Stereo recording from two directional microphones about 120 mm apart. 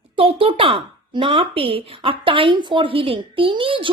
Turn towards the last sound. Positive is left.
turn(degrees=-45)  # may be behind; listen again after turning